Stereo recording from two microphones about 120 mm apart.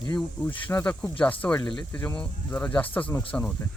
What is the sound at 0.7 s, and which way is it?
Speech, 15° left (ahead or behind).